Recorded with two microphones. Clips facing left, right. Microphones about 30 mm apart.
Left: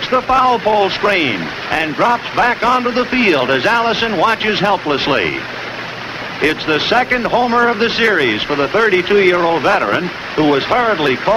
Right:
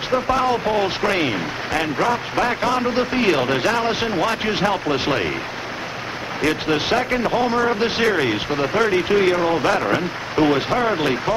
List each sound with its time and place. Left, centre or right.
0.1 s a man's voice: left
6.4 s a man's voice: left